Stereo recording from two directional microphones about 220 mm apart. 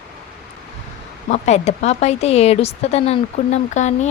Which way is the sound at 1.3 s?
30° left (ahead or behind).